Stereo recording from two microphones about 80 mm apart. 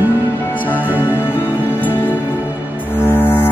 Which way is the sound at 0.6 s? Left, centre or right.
Left.